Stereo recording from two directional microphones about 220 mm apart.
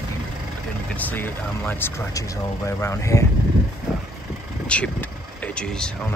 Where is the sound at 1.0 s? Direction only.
5° left (ahead or behind).